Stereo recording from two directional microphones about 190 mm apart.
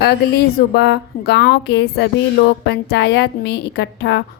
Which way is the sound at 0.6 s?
60° left (ahead or behind).